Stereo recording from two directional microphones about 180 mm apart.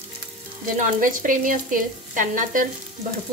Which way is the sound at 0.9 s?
50° right (ahead or behind).